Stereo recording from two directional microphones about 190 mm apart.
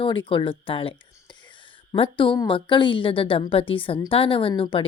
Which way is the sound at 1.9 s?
30° left (ahead or behind).